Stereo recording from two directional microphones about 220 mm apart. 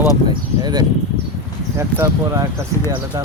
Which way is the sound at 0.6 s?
20° right (ahead or behind).